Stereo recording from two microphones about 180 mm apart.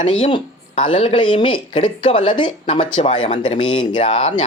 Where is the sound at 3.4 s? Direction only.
25° left (ahead or behind).